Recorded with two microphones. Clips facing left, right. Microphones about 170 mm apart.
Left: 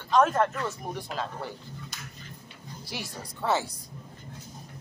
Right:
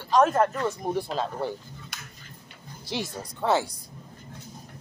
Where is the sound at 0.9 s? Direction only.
30° right (ahead or behind).